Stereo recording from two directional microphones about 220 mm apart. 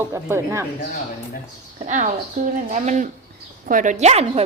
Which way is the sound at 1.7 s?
35° right (ahead or behind).